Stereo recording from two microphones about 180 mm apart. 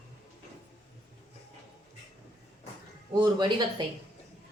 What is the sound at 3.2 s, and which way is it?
Speech, 25° right (ahead or behind).